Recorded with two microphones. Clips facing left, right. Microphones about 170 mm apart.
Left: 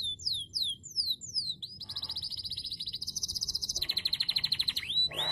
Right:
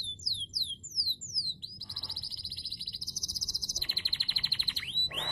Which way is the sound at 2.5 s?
30° left (ahead or behind).